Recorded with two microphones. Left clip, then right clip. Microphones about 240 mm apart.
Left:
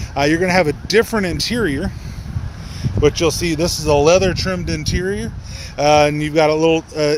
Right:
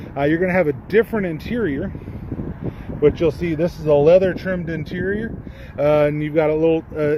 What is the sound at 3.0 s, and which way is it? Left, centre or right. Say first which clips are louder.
Speech: left 1 dB; centre.